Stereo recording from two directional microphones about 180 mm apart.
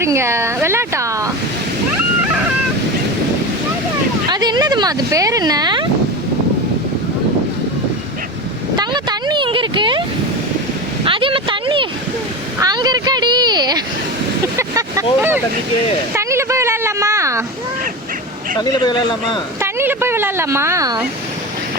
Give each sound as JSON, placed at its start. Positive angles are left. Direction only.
{"t": 0.0, "sound": "a woman's voice", "side_deg": -15}
{"t": 4.3, "sound": "speech", "side_deg": -25}
{"t": 8.7, "sound": "vehicle", "side_deg": -25}
{"t": 11.0, "sound": "a woman's voice", "side_deg": -30}
{"t": 18.6, "sound": "speech", "side_deg": 25}
{"t": 19.6, "sound": "a woman's voice", "side_deg": -10}